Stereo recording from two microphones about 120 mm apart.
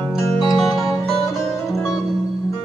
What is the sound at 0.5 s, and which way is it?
Music, centre (ahead or behind).